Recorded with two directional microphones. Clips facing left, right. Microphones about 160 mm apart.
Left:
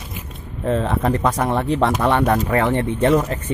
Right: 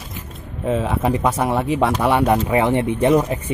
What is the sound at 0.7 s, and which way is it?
Speech, 5° right (ahead or behind).